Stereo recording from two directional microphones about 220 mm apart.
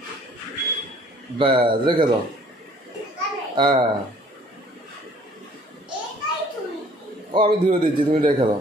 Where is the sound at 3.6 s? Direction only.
20° right (ahead or behind).